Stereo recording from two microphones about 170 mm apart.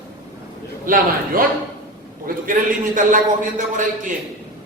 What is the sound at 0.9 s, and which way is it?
A man's voice, 55° right (ahead or behind).